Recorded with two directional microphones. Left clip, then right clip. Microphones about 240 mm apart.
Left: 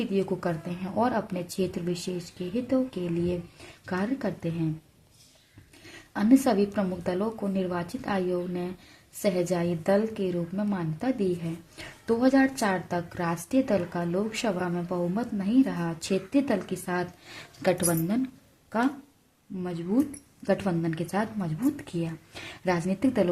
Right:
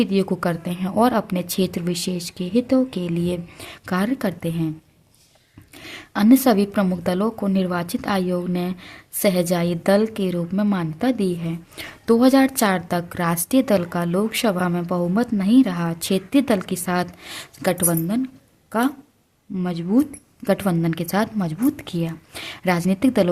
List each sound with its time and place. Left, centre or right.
0.0 s a woman's voice: right
5.8 s a woman's voice: right